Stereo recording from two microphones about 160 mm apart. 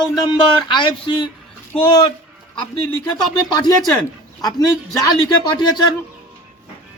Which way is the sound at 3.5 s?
25° left (ahead or behind).